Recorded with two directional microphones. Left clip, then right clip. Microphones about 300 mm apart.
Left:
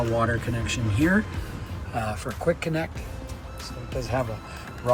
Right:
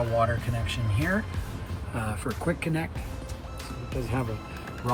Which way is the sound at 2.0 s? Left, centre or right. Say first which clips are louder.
Left 3 dB; centre.